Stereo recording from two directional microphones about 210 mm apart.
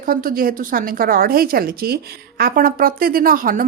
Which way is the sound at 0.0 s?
40° right (ahead or behind).